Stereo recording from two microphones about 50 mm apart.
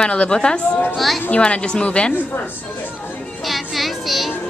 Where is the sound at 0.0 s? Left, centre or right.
Left.